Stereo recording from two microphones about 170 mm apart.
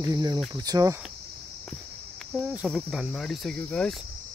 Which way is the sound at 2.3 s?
10° right (ahead or behind).